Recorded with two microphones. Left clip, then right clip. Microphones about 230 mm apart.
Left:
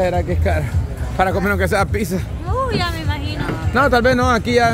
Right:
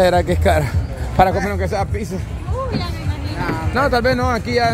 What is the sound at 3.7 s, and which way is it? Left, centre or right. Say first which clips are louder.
Speech: left 3 dB; centre.